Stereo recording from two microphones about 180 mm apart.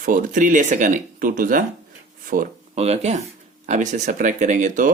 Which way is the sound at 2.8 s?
35° right (ahead or behind).